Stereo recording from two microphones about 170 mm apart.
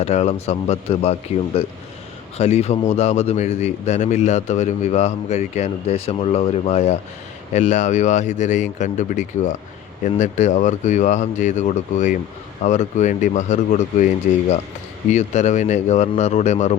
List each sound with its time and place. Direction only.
0.0 s speech: 40° left (ahead or behind)